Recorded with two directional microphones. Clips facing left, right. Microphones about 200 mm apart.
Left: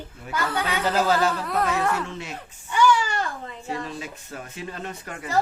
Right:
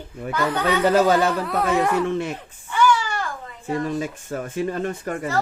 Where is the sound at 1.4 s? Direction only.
Centre (ahead or behind).